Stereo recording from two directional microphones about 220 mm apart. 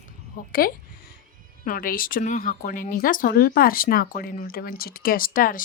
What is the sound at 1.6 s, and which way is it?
Speech, 40° left (ahead or behind).